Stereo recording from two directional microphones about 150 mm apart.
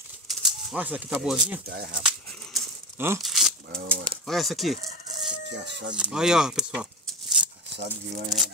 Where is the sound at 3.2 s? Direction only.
Centre (ahead or behind).